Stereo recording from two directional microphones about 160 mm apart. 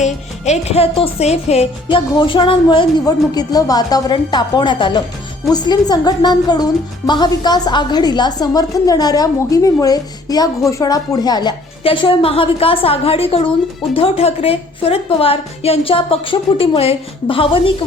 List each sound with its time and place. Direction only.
0.0 s a woman's voice: 45° left (ahead or behind)
2.1 s a woman's voice: 30° left (ahead or behind)